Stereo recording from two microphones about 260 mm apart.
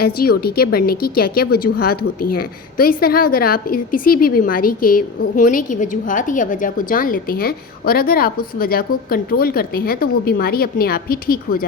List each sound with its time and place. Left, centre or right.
0.0 s a woman's voice: left